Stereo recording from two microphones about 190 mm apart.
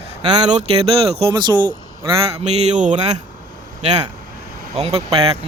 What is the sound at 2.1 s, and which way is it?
Speech, 35° right (ahead or behind).